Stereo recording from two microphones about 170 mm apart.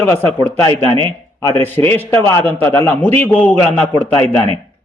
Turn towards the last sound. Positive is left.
turn(degrees=10)  # may be behind; listen again after turning